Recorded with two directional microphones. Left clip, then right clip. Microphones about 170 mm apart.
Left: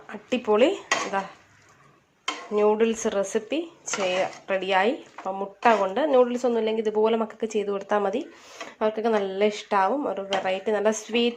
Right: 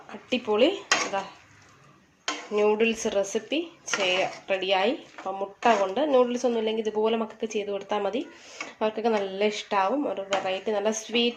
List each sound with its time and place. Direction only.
0.1 s speech: 30° left (ahead or behind)
2.5 s speech: 15° left (ahead or behind)